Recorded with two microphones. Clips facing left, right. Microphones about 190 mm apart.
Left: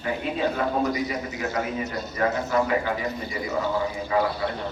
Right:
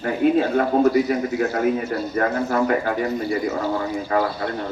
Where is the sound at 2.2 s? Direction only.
50° right (ahead or behind).